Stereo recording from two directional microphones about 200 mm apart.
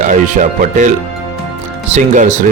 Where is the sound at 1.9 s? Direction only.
40° right (ahead or behind).